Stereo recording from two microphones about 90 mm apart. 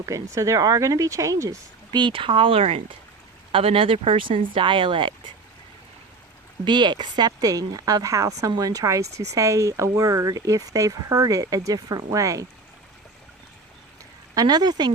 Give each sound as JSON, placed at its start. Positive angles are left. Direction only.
{"t": 0.0, "sound": "speech", "side_deg": -35}
{"t": 6.7, "sound": "speech", "side_deg": -55}
{"t": 14.3, "sound": "speech", "side_deg": -50}